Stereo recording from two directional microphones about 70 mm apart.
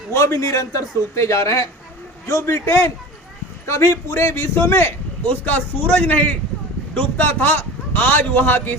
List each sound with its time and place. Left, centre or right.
0.1 s a man's voice: left